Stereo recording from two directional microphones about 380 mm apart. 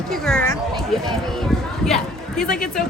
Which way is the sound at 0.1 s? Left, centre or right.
Centre.